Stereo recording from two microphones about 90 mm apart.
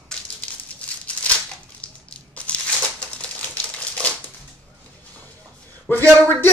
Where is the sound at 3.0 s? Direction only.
15° left (ahead or behind).